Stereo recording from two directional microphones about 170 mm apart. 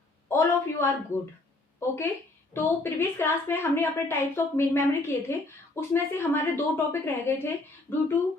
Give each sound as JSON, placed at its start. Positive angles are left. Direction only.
{"t": 0.3, "sound": "a sound", "side_deg": 15}
{"t": 1.1, "sound": "a woman's voice", "side_deg": 15}
{"t": 2.5, "sound": "a woman's voice", "side_deg": 15}